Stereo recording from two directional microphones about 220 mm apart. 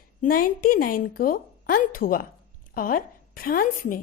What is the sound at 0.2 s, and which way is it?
A woman's voice, 40° left (ahead or behind).